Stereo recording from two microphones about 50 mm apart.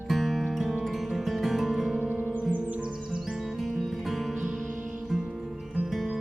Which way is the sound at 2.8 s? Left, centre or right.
Centre.